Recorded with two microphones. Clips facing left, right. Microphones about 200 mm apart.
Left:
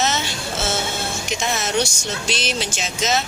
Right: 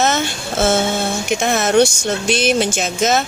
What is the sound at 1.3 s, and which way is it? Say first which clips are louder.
Speech: right 8 dB; 55° right (ahead or behind).